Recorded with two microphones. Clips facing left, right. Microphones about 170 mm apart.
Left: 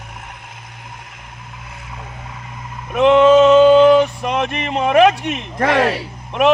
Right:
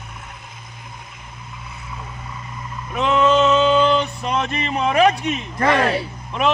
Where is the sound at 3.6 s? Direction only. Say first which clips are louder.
Left 8 dB; 50° left (ahead or behind).